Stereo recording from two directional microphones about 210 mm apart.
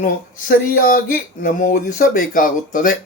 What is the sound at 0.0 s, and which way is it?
Speech, 40° left (ahead or behind).